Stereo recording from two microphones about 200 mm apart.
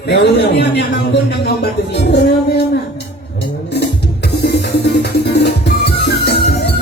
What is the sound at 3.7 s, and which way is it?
Music, 55° left (ahead or behind).